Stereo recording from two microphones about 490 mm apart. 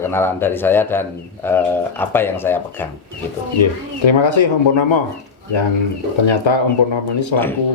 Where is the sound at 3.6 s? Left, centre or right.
Left.